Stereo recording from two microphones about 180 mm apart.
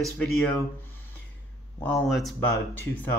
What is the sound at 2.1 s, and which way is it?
A man's voice, centre (ahead or behind).